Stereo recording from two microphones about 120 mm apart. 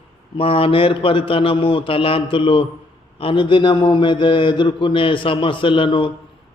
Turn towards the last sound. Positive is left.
turn(degrees=45)  # may be behind; listen again after turning